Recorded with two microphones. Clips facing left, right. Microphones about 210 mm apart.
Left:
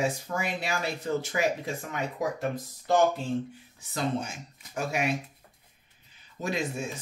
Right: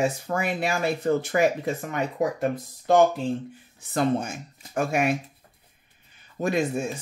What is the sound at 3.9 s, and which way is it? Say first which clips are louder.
Speech: right 6 dB; 55° right (ahead or behind).